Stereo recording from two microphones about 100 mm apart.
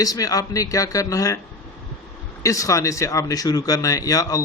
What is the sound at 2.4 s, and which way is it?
Speech, 35° left (ahead or behind).